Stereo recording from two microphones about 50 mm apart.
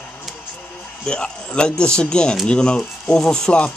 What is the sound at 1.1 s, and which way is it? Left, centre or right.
Speech, centre.